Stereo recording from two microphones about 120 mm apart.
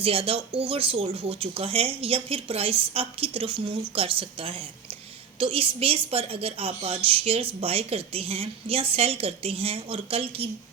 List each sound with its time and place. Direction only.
0.0 s a woman's voice: 50° right (ahead or behind)